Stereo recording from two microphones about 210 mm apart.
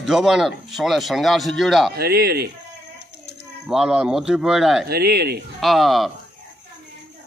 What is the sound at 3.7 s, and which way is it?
Speech, 5° right (ahead or behind).